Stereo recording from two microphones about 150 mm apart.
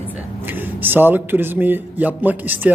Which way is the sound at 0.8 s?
15° right (ahead or behind).